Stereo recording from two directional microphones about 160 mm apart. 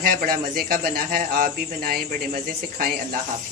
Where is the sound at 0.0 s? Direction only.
70° right (ahead or behind).